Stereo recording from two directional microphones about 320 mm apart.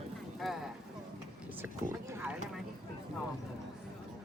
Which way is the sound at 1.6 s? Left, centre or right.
Centre.